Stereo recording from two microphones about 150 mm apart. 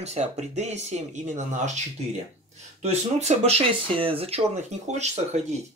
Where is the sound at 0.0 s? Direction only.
45° right (ahead or behind).